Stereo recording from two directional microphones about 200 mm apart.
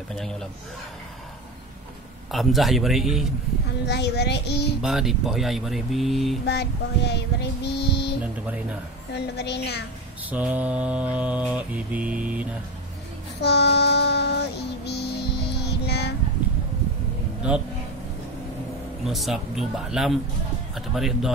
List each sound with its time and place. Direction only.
0.1 s speech: centre (ahead or behind)
2.3 s speech: centre (ahead or behind)
3.8 s child singing: 55° left (ahead or behind)
4.8 s speech: centre (ahead or behind)
6.4 s child singing: 55° left (ahead or behind)
9.1 s child singing: 55° left (ahead or behind)
10.3 s mantra: 5° right (ahead or behind)
13.4 s child singing: 55° left (ahead or behind)
14.9 s music: 55° left (ahead or behind)
19.0 s speech: centre (ahead or behind)